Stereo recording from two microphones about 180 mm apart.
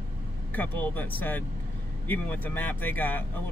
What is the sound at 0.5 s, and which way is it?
Speech, 10° left (ahead or behind).